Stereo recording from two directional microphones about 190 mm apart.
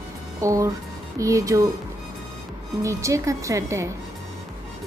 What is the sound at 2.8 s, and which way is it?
A woman's voice, 15° right (ahead or behind).